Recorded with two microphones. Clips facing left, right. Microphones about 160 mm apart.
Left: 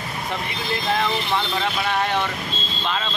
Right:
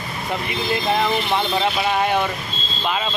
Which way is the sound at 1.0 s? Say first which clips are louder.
Right 3 dB; 15° right (ahead or behind).